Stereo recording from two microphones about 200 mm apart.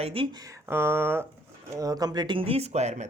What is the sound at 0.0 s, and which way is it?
Speech, 30° right (ahead or behind).